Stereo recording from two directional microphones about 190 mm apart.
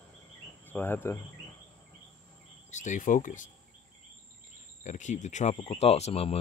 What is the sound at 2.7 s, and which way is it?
Speech, 40° left (ahead or behind).